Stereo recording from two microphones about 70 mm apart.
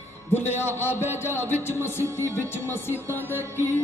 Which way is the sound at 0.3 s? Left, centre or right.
Left.